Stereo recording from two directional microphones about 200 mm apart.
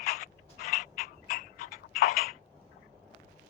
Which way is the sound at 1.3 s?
45° left (ahead or behind).